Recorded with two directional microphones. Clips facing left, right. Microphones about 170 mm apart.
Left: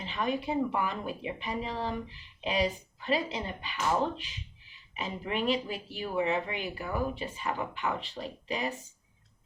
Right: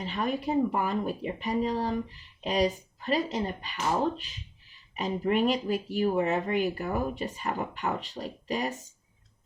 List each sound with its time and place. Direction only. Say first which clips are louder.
0.0 s speech: right 2 dB; 40° right (ahead or behind)
4.9 s speech: right 7 dB; 40° right (ahead or behind)